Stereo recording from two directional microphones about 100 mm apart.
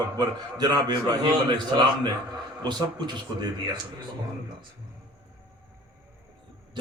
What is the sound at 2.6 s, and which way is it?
Speech, 50° right (ahead or behind).